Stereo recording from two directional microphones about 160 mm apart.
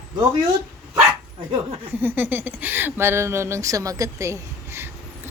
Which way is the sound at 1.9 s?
10° right (ahead or behind).